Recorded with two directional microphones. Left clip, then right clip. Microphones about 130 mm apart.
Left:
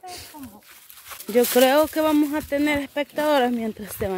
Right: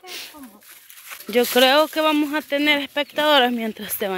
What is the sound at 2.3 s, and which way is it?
Speech, 5° left (ahead or behind).